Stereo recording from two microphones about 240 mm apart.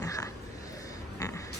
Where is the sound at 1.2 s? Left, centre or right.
Centre.